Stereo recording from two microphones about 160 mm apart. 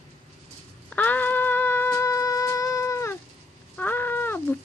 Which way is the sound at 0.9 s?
10° left (ahead or behind).